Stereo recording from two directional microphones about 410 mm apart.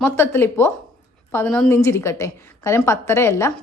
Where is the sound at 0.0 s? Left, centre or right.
Centre.